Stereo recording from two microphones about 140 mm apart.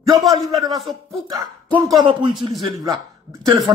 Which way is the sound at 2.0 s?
35° right (ahead or behind).